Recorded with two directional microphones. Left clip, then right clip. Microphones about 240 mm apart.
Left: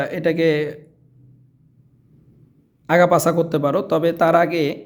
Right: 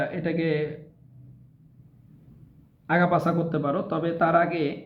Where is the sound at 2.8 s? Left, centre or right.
Left.